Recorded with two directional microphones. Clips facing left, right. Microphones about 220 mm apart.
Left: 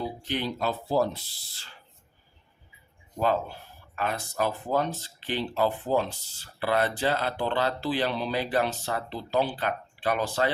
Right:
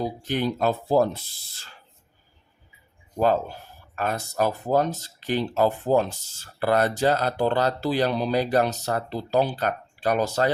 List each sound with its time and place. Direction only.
0.0 s speech: 45° right (ahead or behind)
3.2 s speech: 40° right (ahead or behind)